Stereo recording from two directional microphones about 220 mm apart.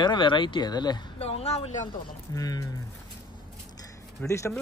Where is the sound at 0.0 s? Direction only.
20° left (ahead or behind).